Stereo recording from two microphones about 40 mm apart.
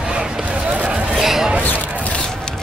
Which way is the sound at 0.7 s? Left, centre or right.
Right.